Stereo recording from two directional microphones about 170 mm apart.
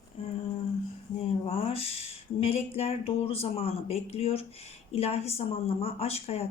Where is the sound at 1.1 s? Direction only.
35° left (ahead or behind).